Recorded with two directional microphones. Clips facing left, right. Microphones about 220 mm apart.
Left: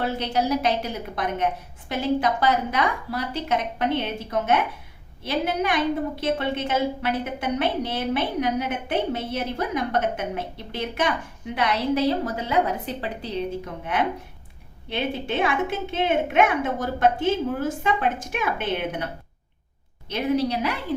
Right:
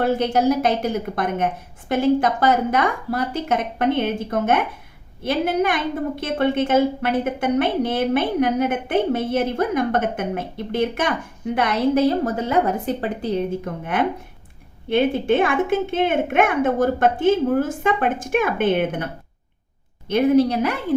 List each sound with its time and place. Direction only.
0.0 s a woman's voice: 50° right (ahead or behind)
14.8 s a woman's voice: 50° right (ahead or behind)
20.1 s a woman's voice: 50° right (ahead or behind)